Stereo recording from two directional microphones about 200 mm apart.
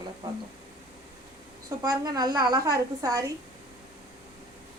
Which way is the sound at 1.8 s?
20° right (ahead or behind).